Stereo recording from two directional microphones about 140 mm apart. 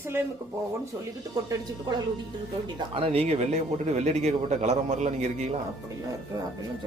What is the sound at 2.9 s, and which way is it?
A man's voice, 45° right (ahead or behind).